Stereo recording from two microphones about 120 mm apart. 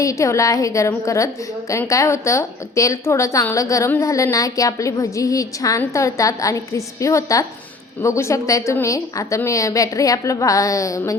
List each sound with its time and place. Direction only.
0.0 s a woman's voice: 25° left (ahead or behind)